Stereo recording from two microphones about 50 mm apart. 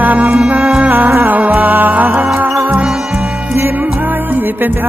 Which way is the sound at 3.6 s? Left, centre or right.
Right.